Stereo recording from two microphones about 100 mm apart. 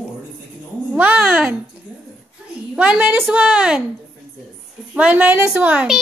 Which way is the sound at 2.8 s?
15° right (ahead or behind).